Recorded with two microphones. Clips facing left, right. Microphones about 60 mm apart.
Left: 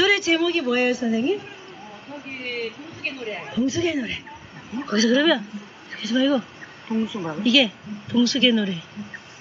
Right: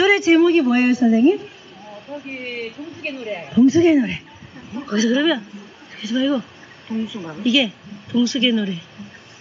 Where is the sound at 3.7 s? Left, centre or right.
Right.